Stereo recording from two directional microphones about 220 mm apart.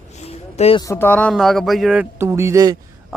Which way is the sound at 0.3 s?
30° left (ahead or behind).